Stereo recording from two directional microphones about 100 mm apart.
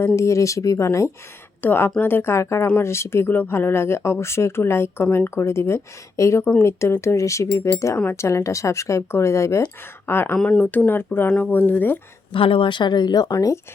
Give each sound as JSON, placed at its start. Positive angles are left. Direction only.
{"t": 0.2, "sound": "speech", "side_deg": 30}
{"t": 10.3, "sound": "speech", "side_deg": 5}
{"t": 10.6, "sound": "speech", "side_deg": 15}
{"t": 12.3, "sound": "speech", "side_deg": 65}